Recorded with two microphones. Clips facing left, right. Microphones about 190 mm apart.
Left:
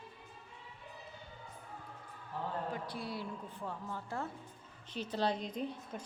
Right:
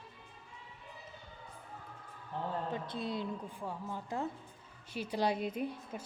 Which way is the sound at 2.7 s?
20° right (ahead or behind).